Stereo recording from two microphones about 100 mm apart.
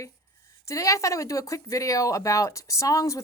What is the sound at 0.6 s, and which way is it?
Speech, 30° left (ahead or behind).